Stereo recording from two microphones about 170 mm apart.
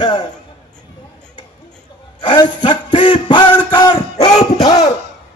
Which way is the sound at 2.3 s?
30° left (ahead or behind).